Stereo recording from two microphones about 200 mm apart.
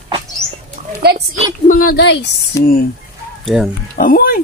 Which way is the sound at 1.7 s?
45° left (ahead or behind).